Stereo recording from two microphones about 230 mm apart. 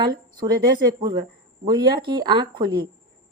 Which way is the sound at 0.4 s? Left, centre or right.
Centre.